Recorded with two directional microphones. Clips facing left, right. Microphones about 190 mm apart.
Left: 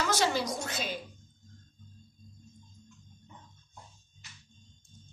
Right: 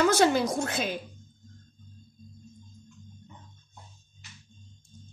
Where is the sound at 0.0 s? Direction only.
55° right (ahead or behind).